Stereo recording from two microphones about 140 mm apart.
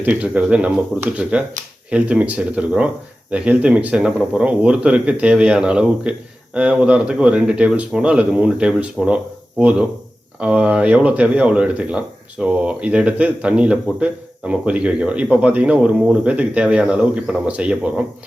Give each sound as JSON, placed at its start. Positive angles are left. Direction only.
{"t": 0.0, "sound": "speech", "side_deg": -10}